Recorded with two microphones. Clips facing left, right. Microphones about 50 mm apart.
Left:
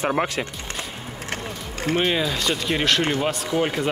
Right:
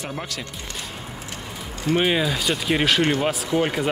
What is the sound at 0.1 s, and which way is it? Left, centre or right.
Speech, left.